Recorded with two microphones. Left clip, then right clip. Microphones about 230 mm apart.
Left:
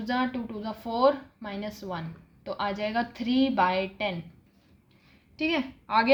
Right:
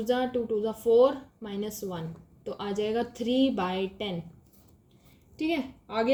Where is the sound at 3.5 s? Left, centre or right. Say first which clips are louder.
Left 6 dB; left.